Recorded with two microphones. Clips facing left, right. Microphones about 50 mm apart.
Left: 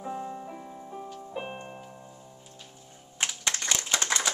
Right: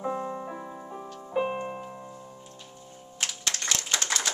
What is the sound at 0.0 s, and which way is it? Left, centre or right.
Music, right.